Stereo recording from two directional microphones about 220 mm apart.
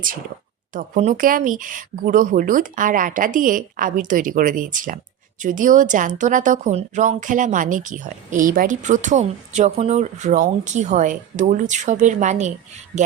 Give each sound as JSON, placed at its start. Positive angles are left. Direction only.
{"t": 0.7, "sound": "speech", "side_deg": -35}